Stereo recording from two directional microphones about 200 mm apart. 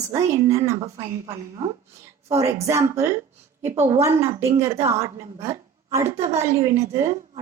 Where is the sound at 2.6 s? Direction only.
15° right (ahead or behind).